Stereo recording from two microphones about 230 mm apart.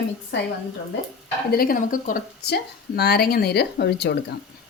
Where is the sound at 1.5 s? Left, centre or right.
Left.